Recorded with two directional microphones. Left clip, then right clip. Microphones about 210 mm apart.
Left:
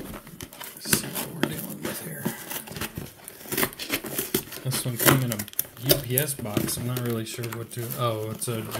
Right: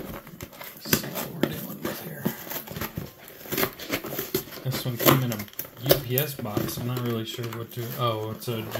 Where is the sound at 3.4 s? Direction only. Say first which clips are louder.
Even; 10° left (ahead or behind).